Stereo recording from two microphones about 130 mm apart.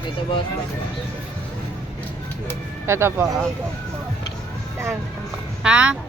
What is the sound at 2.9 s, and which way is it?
Speech, 20° right (ahead or behind).